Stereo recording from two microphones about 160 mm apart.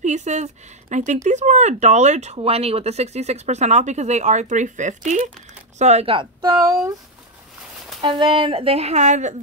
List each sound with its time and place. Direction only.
0.0 s speech: 45° right (ahead or behind); by 7.0 s 20° right (ahead or behind)
8.0 s speech: 30° right (ahead or behind); by 9.3 s 45° right (ahead or behind)